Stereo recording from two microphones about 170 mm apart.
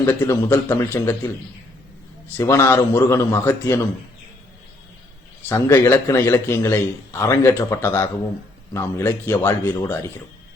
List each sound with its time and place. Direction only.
0.0 s a man's voice: 15° left (ahead or behind)
2.3 s a man's voice: 15° left (ahead or behind)
5.5 s a man's voice: 15° left (ahead or behind)